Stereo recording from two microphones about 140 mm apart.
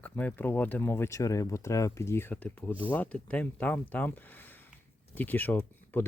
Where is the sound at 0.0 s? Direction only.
10° left (ahead or behind).